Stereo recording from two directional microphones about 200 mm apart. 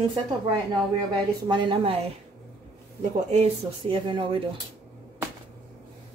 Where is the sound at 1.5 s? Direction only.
25° right (ahead or behind).